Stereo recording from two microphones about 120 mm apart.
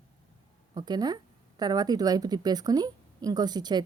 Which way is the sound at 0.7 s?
35° right (ahead or behind).